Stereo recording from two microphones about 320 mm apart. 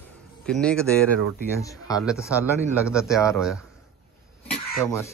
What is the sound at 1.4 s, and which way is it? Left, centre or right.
Speech, centre.